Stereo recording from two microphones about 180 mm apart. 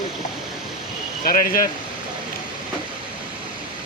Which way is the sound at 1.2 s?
50° left (ahead or behind).